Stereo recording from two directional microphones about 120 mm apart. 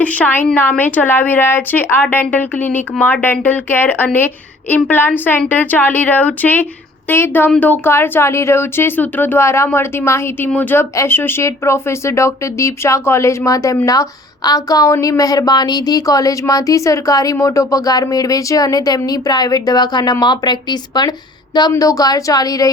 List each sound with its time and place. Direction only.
0.0 s speech: 10° left (ahead or behind); by 22.7 s 30° left (ahead or behind)